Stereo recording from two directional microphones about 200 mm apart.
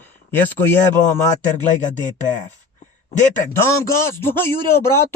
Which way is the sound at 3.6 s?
10° left (ahead or behind).